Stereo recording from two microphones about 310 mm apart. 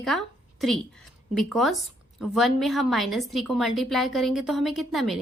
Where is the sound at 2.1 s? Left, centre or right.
Centre.